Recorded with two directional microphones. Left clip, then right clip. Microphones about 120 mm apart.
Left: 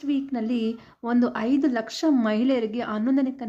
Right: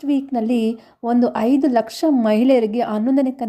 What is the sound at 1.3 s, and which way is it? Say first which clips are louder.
A woman's voice: right 7 dB; 40° right (ahead or behind).